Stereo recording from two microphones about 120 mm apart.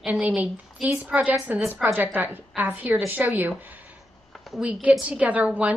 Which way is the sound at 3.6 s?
15° right (ahead or behind).